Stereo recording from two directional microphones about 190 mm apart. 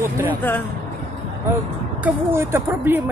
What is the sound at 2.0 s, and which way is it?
Speech, 15° right (ahead or behind).